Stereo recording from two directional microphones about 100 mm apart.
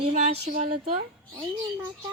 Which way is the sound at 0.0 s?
90° right.